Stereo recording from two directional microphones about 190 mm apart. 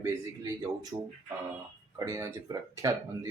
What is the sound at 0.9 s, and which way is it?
Speech, 20° right (ahead or behind).